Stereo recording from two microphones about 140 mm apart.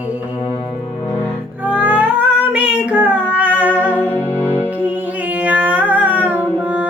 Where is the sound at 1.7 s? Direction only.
10° right (ahead or behind).